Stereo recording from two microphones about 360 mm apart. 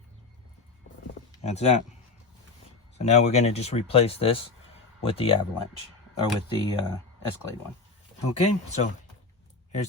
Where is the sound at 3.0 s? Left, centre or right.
Centre.